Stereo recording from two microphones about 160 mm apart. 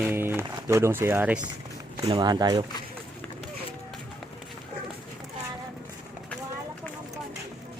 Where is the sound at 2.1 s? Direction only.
25° right (ahead or behind).